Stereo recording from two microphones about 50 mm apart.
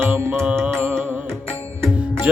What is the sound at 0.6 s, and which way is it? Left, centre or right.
Music, right.